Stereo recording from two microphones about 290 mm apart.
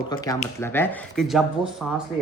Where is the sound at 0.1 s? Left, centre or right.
Centre.